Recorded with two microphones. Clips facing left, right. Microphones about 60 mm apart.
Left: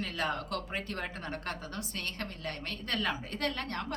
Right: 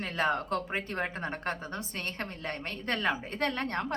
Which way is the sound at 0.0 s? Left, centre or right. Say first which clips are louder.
Right 4 dB; right.